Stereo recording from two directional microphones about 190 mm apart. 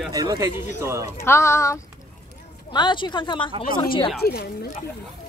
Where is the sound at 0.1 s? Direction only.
20° right (ahead or behind).